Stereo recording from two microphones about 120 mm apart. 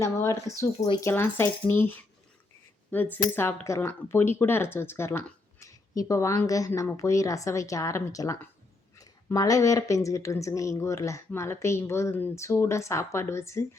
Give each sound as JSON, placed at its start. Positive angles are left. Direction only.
{"t": 0.0, "sound": "speech", "side_deg": 25}